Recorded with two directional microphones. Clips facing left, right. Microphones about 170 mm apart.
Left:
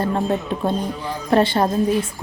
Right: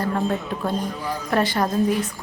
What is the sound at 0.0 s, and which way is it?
A woman's voice, 25° left (ahead or behind).